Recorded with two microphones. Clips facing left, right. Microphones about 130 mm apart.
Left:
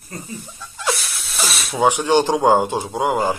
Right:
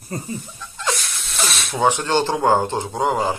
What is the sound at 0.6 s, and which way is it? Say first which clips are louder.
Speech: left 3 dB; 10° left (ahead or behind).